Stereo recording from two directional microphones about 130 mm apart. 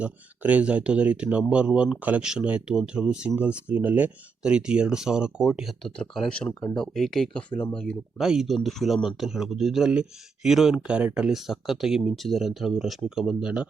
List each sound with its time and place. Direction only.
0.0 s speech: 10° right (ahead or behind); by 6.5 s 5° left (ahead or behind)
6.5 s speech: 25° left (ahead or behind)
6.7 s speech: 5° left (ahead or behind)
8.2 s speech: 5° right (ahead or behind)